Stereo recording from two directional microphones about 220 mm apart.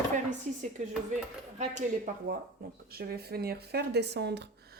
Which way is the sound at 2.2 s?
45° right (ahead or behind).